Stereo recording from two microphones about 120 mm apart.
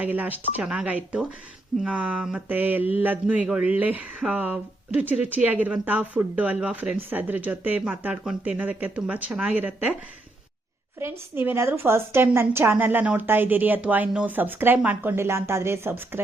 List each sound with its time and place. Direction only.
0.0 s speech: 15° right (ahead or behind)
11.0 s a woman's voice: 20° right (ahead or behind)